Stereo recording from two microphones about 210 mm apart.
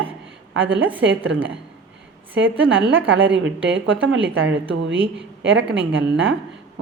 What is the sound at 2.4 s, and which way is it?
A woman's voice, 65° right (ahead or behind).